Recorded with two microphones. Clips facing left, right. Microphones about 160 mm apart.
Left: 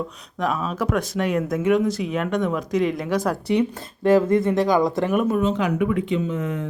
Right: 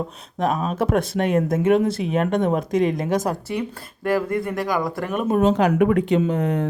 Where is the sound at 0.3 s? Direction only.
45° right (ahead or behind).